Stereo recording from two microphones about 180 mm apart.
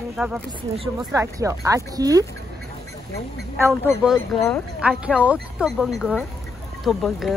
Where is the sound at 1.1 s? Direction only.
15° right (ahead or behind).